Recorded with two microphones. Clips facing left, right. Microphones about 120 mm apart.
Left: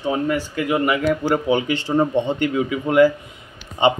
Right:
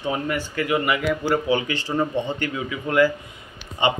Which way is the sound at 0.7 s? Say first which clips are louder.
Left 3 dB; centre (ahead or behind).